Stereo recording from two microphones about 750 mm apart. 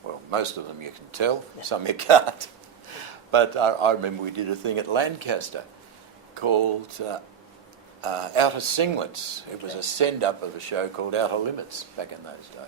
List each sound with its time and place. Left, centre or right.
0.3 s a man's voice: right